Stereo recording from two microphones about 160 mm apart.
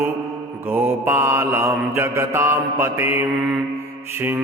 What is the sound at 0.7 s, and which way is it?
Mantra, 15° right (ahead or behind).